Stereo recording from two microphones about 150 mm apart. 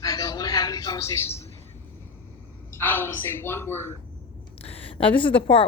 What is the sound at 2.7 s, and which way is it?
A woman's voice, 15° left (ahead or behind).